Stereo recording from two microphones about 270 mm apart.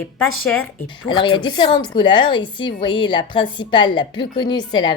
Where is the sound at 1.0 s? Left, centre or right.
Centre.